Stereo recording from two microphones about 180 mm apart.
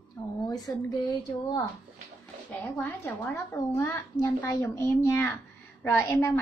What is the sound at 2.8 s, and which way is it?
A woman's voice, 15° left (ahead or behind).